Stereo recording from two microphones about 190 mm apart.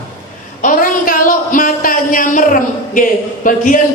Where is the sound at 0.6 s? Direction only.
45° left (ahead or behind).